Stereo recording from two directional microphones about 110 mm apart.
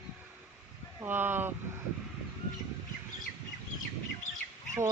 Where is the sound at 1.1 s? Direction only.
20° right (ahead or behind).